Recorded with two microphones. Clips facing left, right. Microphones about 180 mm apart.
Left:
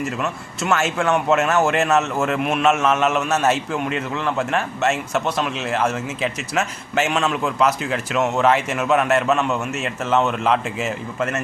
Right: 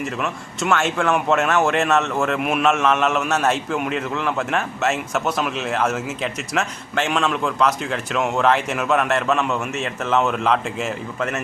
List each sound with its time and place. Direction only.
0.2 s speech: centre (ahead or behind)